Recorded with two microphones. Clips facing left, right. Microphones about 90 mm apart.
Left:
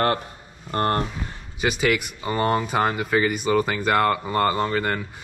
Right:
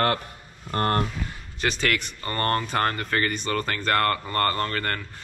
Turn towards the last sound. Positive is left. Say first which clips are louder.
# left 4 dB
turn(degrees=10)  # may be behind; listen again after turning